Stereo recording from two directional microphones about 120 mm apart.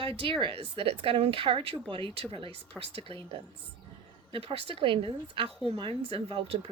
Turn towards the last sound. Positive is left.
turn(degrees=-50)  # may be behind; listen again after turning